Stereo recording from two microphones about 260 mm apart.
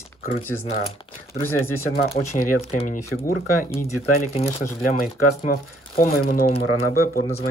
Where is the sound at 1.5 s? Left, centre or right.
Left.